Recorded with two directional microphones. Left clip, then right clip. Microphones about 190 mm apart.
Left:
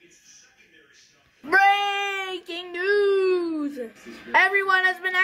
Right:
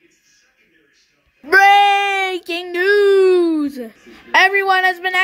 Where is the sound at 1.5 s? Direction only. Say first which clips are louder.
Right 9 dB; 35° right (ahead or behind).